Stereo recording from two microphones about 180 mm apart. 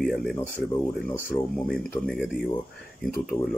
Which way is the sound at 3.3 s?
20° left (ahead or behind).